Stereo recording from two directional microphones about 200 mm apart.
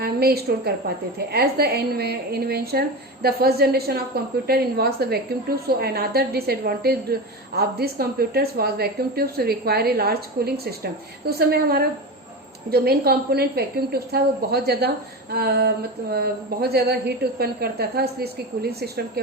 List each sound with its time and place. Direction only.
0.0 s a woman's voice: 50° right (ahead or behind)